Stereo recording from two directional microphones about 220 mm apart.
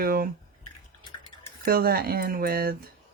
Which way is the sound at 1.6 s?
45° right (ahead or behind).